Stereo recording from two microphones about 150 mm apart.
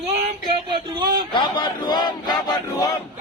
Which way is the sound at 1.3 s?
30° left (ahead or behind).